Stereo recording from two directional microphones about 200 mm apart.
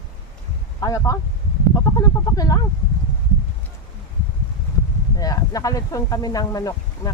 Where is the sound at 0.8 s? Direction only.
15° left (ahead or behind).